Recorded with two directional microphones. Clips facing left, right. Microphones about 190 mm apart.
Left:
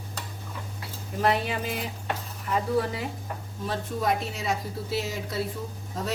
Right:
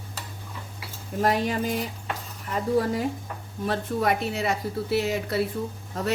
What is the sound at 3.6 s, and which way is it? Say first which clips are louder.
A woman's voice: right 3 dB; 65° right (ahead or behind).